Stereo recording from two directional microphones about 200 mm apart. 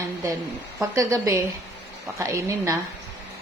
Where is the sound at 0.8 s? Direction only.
15° right (ahead or behind).